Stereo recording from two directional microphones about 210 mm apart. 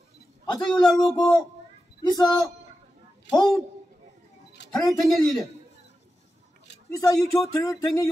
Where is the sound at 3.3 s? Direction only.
20° left (ahead or behind).